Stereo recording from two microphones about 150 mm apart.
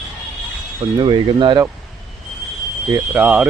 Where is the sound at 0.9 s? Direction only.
30° right (ahead or behind).